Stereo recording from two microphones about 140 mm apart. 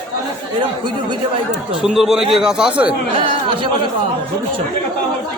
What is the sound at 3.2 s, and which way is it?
Speech, 40° right (ahead or behind).